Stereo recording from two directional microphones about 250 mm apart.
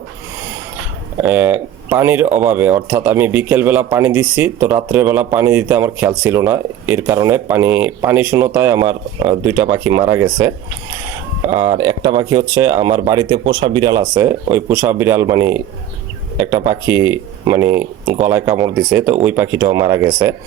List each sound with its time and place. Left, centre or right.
1.2 s speech: centre
16.6 s speech: centre